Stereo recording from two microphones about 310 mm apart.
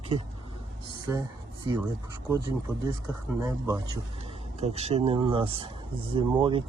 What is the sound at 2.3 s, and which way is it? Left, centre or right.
Speech, centre.